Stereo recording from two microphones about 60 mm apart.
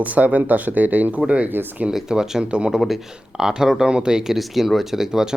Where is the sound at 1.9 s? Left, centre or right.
Centre.